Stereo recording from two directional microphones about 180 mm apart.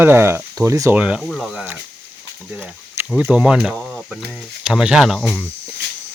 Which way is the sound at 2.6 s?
10° right (ahead or behind).